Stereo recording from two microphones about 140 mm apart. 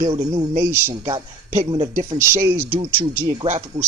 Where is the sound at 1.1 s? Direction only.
40° right (ahead or behind).